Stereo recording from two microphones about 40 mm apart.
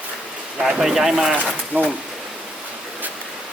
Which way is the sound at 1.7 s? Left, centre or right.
Right.